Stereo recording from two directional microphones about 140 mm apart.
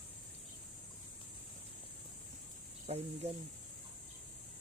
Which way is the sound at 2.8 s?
50° right (ahead or behind).